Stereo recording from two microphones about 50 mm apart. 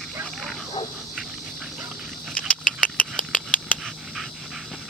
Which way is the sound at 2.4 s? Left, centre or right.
Left.